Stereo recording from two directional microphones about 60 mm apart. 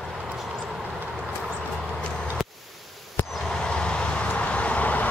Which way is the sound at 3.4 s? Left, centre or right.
Centre.